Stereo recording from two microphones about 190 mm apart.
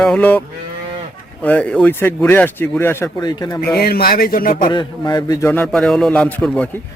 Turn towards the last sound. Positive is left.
turn(degrees=5)  # may be behind; listen again after turning